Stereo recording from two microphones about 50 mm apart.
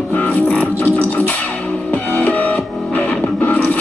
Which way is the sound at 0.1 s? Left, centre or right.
Left.